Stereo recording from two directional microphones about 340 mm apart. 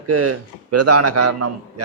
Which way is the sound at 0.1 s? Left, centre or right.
Right.